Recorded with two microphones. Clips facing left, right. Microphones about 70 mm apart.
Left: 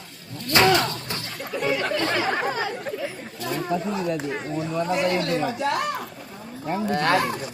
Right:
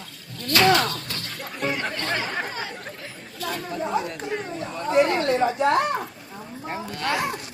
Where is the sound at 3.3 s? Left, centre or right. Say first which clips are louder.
Even; left.